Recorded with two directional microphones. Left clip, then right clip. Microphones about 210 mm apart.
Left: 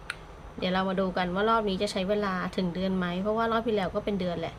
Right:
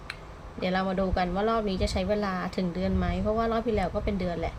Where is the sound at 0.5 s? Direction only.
5° left (ahead or behind).